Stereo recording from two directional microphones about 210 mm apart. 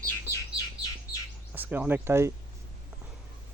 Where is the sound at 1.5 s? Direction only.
10° right (ahead or behind).